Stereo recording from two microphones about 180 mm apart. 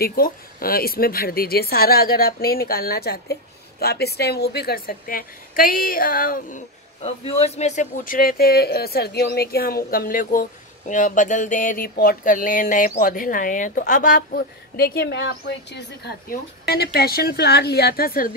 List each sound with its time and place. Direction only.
0.0 s a woman's voice: 55° left (ahead or behind)
7.0 s speech: 35° left (ahead or behind); by 18.3 s 55° left (ahead or behind)